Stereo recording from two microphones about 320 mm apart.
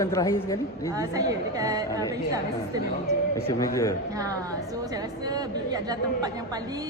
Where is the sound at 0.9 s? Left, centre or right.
Centre.